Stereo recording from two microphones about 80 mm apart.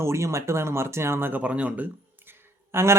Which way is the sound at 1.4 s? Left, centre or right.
Centre.